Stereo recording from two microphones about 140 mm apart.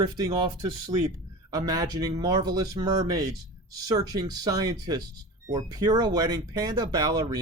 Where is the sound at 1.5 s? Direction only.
25° right (ahead or behind).